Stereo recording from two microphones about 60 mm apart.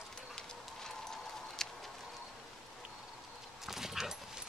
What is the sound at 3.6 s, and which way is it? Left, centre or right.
Dog, centre.